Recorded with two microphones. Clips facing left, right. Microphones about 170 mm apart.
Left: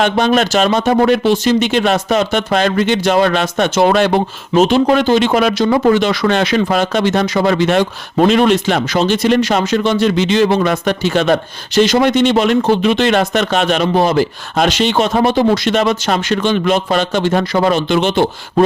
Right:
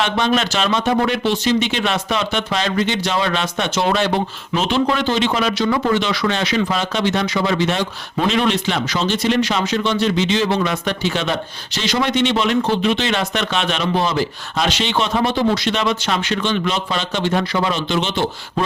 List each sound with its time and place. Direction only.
0.0 s speech: 45° left (ahead or behind)
5.6 s speech: 40° left (ahead or behind)